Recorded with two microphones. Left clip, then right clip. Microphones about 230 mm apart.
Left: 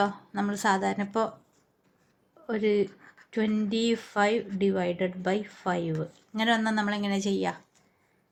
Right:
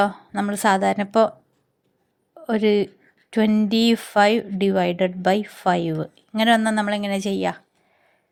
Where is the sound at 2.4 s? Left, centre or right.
Right.